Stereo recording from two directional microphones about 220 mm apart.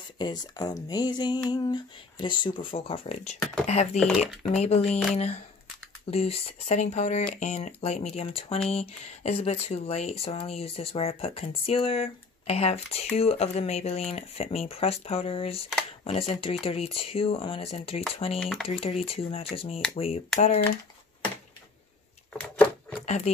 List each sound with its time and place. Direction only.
0.2 s speech: 20° left (ahead or behind)
18.4 s speech: centre (ahead or behind)
18.7 s speech: 30° left (ahead or behind)
22.4 s a sound: 5° left (ahead or behind)
23.0 s speech: 30° left (ahead or behind)